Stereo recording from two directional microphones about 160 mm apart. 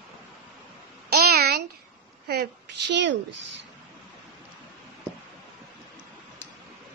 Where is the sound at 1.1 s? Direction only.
75° right (ahead or behind).